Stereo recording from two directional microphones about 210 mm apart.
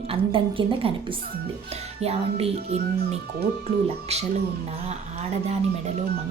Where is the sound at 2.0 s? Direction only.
30° right (ahead or behind).